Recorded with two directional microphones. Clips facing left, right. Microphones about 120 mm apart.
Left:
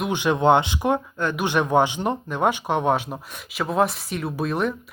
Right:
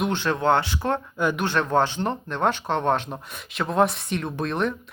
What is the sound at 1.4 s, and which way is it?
Speech, 15° left (ahead or behind).